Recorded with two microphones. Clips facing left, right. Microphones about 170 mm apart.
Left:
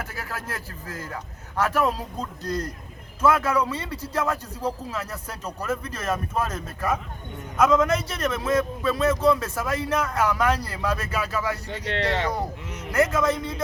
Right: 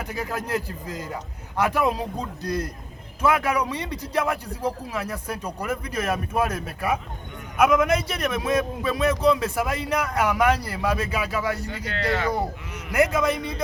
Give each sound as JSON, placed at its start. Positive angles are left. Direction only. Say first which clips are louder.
{"t": 0.0, "sound": "a man's voice", "louder": "right 5 dB", "side_deg": -15}
{"t": 11.7, "sound": "speech", "louder": "left 1 dB", "side_deg": 30}
{"t": 12.4, "sound": "a man's voice", "louder": "right 2 dB", "side_deg": -10}